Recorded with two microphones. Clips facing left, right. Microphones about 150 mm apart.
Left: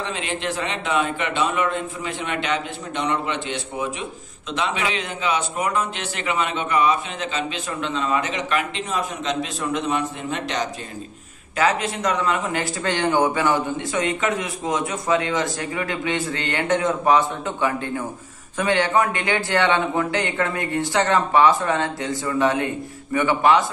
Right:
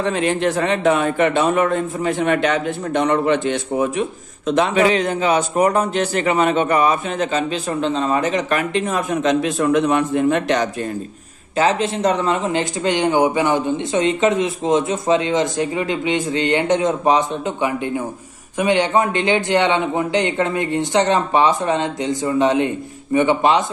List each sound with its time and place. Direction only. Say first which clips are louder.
0.0 s a man's voice: right 9 dB; 45° right (ahead or behind)
11.5 s speech: right 4 dB; 30° right (ahead or behind)